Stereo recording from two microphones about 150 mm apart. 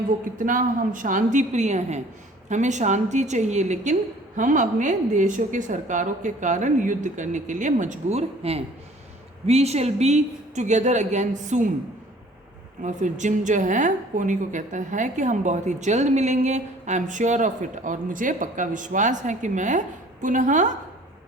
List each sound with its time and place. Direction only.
0.3 s a woman's voice: 60° right (ahead or behind)
12.8 s a woman's voice: 55° right (ahead or behind)